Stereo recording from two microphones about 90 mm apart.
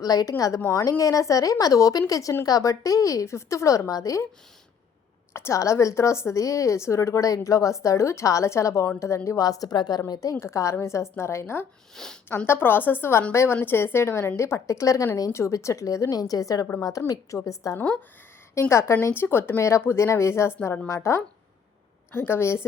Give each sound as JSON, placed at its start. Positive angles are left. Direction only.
{"t": 0.0, "sound": "speech", "side_deg": 45}
{"t": 5.3, "sound": "a woman's voice", "side_deg": 30}
{"t": 12.0, "sound": "speech", "side_deg": 5}
{"t": 12.5, "sound": "speech", "side_deg": 25}
{"t": 17.7, "sound": "speech", "side_deg": 20}
{"t": 18.7, "sound": "speech", "side_deg": 30}